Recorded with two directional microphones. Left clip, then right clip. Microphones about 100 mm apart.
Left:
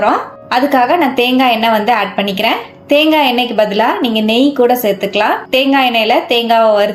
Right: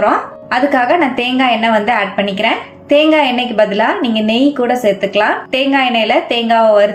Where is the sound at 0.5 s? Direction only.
30° left (ahead or behind).